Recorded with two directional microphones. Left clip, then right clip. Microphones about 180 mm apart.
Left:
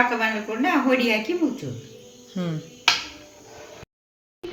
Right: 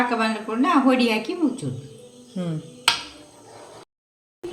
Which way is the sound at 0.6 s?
65° right (ahead or behind).